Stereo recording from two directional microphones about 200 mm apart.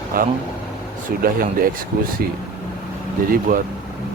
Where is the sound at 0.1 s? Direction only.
45° right (ahead or behind).